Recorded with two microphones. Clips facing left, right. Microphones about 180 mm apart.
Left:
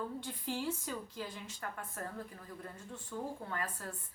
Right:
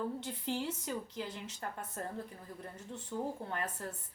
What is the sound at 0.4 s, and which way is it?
A woman's voice, 25° right (ahead or behind).